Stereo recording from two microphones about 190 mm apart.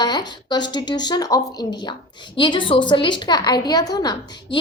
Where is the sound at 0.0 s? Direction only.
20° left (ahead or behind).